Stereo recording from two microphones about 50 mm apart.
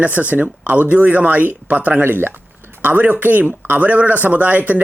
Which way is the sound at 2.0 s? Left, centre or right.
Right.